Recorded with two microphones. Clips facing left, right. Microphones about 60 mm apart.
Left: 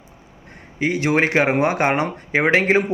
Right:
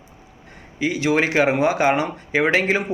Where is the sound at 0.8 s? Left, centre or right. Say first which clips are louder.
Left 1 dB; left.